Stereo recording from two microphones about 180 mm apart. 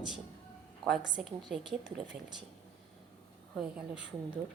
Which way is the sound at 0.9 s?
Centre (ahead or behind).